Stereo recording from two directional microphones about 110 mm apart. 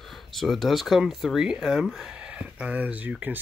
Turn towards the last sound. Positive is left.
turn(degrees=-15)  # may be behind; listen again after turning